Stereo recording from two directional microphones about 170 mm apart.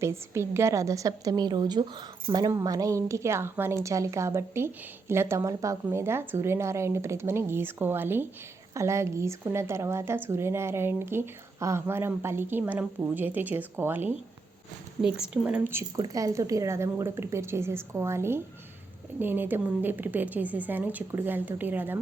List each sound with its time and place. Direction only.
0.0 s a woman's voice: 15° right (ahead or behind)